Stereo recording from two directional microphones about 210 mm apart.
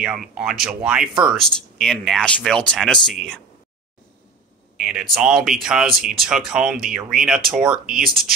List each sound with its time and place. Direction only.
0.0 s speech: 5° right (ahead or behind)
4.7 s speech: 5° right (ahead or behind)
8.0 s speech: 45° right (ahead or behind)